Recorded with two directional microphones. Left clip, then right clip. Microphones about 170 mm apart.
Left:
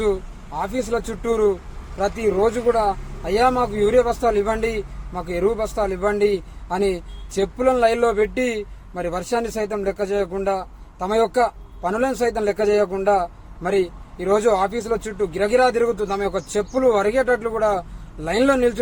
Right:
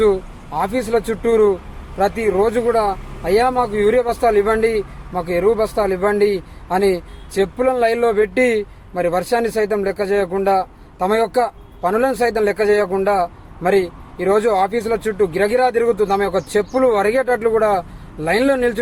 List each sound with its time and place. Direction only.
0.0 s speech: 15° right (ahead or behind)